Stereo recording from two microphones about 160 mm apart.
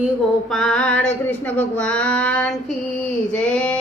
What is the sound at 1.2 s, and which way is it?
Speech, 10° left (ahead or behind).